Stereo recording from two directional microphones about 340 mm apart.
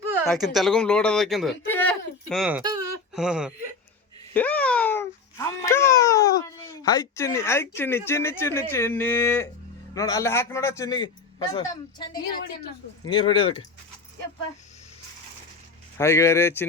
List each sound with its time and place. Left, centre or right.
0.2 s speech: centre
4.4 s a sound: centre
9.9 s a man's voice: centre
16.0 s a man's voice: centre